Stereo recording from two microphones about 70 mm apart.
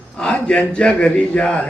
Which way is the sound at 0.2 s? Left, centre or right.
Centre.